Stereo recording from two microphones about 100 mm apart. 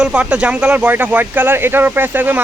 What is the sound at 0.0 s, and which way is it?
Speech, 10° right (ahead or behind).